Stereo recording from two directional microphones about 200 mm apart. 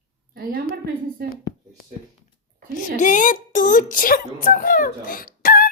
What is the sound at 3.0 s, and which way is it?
Speech, 40° left (ahead or behind).